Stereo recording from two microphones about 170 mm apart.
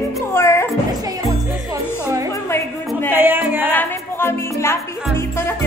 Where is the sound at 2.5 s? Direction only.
15° left (ahead or behind).